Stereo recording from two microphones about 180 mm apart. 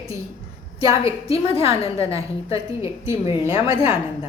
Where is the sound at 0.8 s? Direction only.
20° right (ahead or behind).